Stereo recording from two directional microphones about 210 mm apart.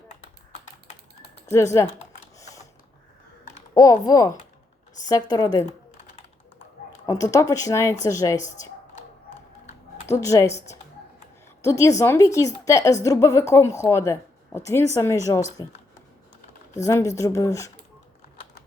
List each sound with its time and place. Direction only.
1.5 s a woman's voice: 15° left (ahead or behind)
2.4 s a sound: 15° left (ahead or behind)
3.8 s a woman's voice: 15° left (ahead or behind)
7.0 s a woman's voice: 15° left (ahead or behind)
10.1 s a woman's voice: 15° left (ahead or behind)
11.6 s a woman's voice: 15° left (ahead or behind)
16.8 s a woman's voice: 15° left (ahead or behind)